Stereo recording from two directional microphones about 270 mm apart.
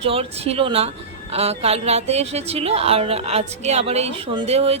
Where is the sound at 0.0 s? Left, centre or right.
Right.